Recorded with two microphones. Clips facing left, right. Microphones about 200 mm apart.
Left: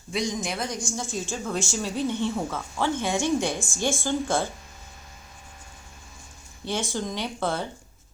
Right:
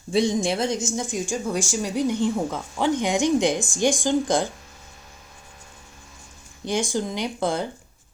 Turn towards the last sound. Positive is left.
turn(degrees=-15)  # may be behind; listen again after turning